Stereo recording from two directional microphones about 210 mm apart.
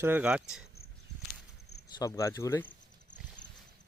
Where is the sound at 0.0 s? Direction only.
10° right (ahead or behind).